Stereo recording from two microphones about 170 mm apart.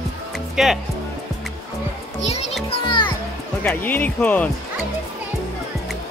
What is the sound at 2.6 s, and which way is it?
Music, 30° left (ahead or behind).